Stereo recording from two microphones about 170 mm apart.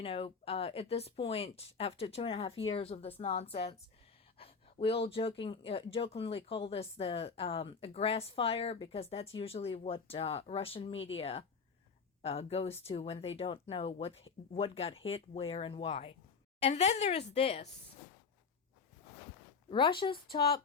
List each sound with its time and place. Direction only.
0.0 s speech: 35° left (ahead or behind)
19.7 s speech: 30° left (ahead or behind)